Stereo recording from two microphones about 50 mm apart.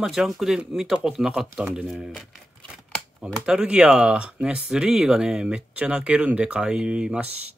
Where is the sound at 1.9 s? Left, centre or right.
Centre.